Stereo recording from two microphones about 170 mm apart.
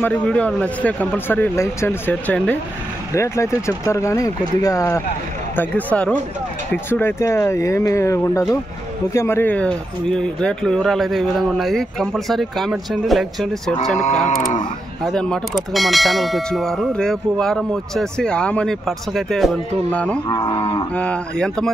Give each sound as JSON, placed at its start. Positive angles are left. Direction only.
{"t": 0.0, "sound": "speech", "side_deg": 5}
{"t": 9.1, "sound": "clang", "side_deg": 15}
{"t": 15.0, "sound": "clang", "side_deg": 5}
{"t": 20.2, "sound": "cattle", "side_deg": 25}
{"t": 20.9, "sound": "clang", "side_deg": 5}